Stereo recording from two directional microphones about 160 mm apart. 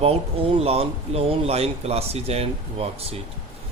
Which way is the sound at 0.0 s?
40° right (ahead or behind).